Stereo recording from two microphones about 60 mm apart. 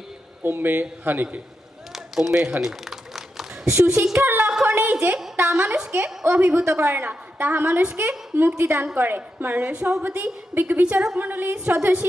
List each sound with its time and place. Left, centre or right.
0.4 s a woman's voice: right
1.9 s a sound: centre
3.6 s a woman's voice: right
4.6 s a sound: right
6.2 s a woman's voice: right
6.5 s a man's voice: right